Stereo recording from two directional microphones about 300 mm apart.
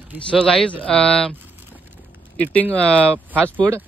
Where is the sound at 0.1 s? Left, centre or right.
Centre.